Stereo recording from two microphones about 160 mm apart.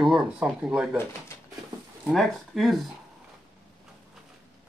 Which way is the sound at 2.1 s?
Centre (ahead or behind).